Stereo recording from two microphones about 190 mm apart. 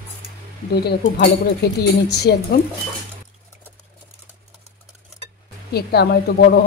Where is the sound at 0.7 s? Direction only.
60° left (ahead or behind).